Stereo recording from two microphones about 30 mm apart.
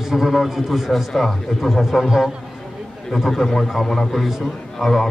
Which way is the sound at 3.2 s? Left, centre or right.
Centre.